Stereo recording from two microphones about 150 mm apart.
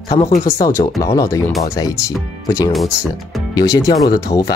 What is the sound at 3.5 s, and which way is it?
Speech, 20° left (ahead or behind).